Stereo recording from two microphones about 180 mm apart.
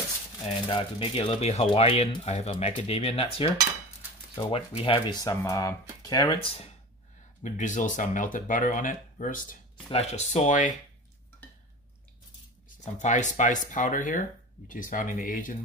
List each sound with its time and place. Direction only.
0.7 s speech: 30° left (ahead or behind)
7.4 s speech: 45° left (ahead or behind)
9.8 s speech: 35° left (ahead or behind)
12.6 s speech: 45° left (ahead or behind)